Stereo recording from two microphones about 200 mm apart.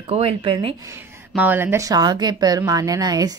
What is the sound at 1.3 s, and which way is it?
A woman's voice, 10° right (ahead or behind).